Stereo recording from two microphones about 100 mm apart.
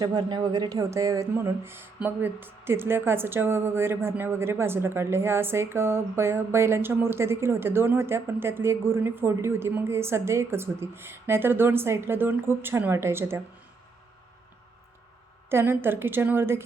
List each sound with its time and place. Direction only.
0.0 s a woman's voice: 45° right (ahead or behind); by 13.4 s 25° right (ahead or behind)
15.4 s a woman's voice: 25° right (ahead or behind)